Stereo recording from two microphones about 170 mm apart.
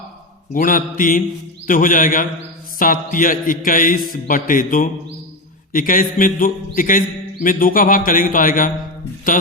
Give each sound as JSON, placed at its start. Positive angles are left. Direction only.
{"t": 0.5, "sound": "a man's voice", "side_deg": 55}